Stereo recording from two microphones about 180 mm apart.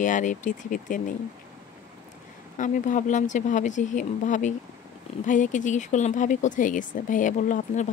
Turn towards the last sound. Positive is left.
turn(degrees=45)  # may be behind; listen again after turning